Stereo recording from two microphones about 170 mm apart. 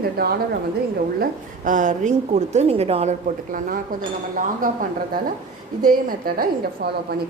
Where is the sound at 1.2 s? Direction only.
50° right (ahead or behind).